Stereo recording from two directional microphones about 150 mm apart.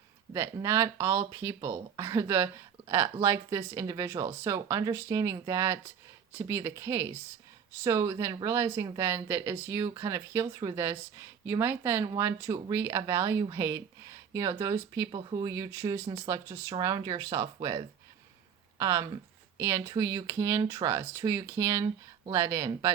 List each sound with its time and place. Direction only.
0.3 s speech: 15° right (ahead or behind)
15.1 s speech: 30° right (ahead or behind)